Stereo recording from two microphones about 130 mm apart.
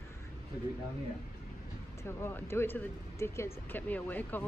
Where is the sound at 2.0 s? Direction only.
20° left (ahead or behind).